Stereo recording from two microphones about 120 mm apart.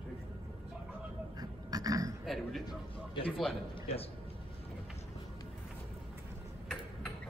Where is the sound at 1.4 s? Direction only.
30° right (ahead or behind).